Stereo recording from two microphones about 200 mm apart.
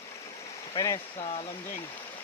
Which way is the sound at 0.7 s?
15° left (ahead or behind).